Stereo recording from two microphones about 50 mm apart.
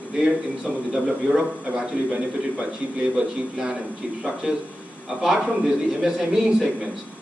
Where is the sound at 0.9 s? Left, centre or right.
Centre.